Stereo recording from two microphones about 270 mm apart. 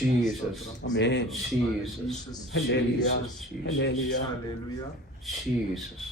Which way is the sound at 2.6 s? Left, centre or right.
Left.